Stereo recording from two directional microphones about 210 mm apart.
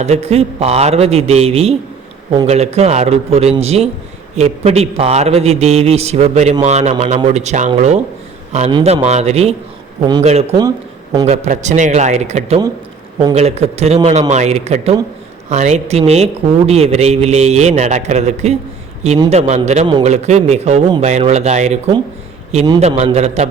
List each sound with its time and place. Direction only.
0.0 s a man's voice: 30° right (ahead or behind)
22.8 s a man's voice: 30° right (ahead or behind)